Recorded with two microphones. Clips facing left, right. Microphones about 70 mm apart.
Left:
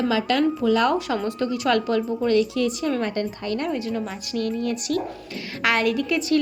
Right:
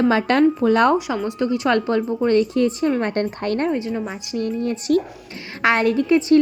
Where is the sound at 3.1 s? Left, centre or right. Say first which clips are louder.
Right 4 dB; right.